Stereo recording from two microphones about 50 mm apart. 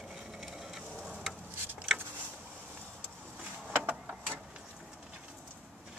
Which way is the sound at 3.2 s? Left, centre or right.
Right.